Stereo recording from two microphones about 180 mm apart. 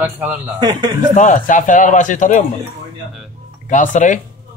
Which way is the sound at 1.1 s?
45° left (ahead or behind).